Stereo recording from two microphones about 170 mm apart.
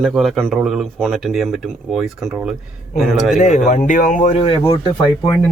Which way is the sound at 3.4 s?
45° left (ahead or behind).